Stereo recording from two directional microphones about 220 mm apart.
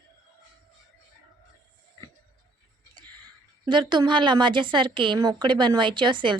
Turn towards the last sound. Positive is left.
turn(degrees=-20)  # may be behind; listen again after turning